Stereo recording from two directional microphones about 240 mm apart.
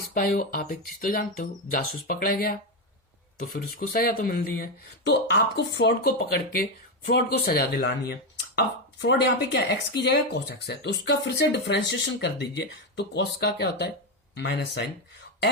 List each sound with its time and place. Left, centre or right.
0.1 s speech: left